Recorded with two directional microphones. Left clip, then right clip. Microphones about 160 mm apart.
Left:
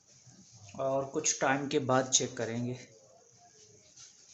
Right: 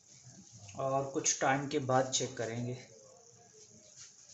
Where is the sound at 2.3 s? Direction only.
35° left (ahead or behind).